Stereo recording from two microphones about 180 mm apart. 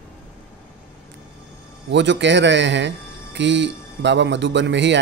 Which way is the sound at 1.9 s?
75° right (ahead or behind).